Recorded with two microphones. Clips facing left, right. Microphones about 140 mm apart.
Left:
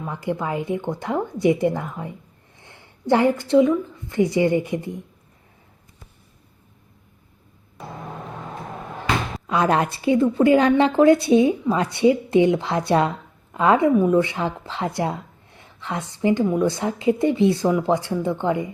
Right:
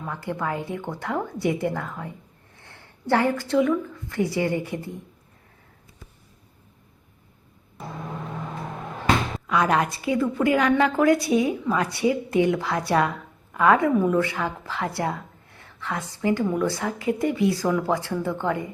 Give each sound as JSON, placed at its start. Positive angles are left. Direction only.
{"t": 0.0, "sound": "a woman's voice", "side_deg": 20}
{"t": 9.5, "sound": "speech", "side_deg": 25}